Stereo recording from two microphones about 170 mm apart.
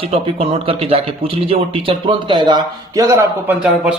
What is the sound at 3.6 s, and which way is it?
Speech, 5° right (ahead or behind).